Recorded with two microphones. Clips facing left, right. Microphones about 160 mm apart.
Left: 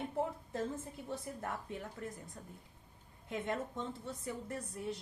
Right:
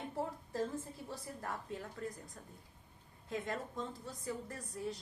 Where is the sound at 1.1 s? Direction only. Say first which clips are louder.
Left 3 dB; 20° left (ahead or behind).